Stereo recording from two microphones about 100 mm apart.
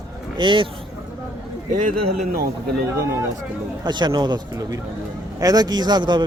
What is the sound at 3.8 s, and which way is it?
Speech, 50° right (ahead or behind).